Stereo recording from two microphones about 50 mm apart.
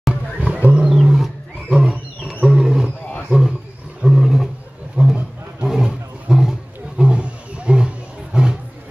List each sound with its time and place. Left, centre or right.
0.1 s roaring cats: right
0.8 s roaring cats: centre
4.0 s roar: centre
5.0 s a sound: centre
5.7 s roaring cats: centre